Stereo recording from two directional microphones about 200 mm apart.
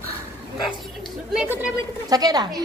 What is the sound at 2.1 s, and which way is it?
Speech, 20° right (ahead or behind).